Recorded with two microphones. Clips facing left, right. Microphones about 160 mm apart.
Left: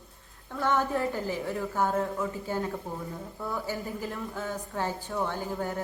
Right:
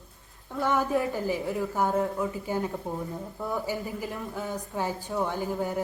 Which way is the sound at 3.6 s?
10° right (ahead or behind).